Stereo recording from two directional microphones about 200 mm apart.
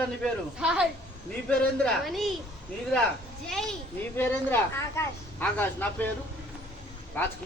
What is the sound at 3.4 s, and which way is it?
Speech, centre (ahead or behind).